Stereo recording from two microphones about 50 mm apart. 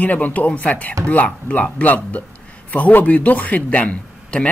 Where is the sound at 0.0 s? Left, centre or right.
Left.